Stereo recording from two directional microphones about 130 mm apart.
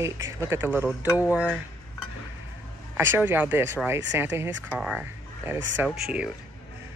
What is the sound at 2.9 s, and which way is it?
Speech, 15° right (ahead or behind).